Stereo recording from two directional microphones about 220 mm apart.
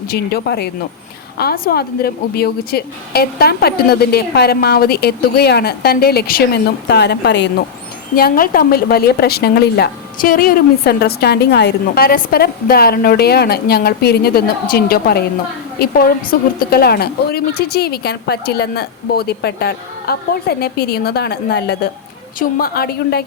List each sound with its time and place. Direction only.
0.1 s a woman's voice: 45° left (ahead or behind)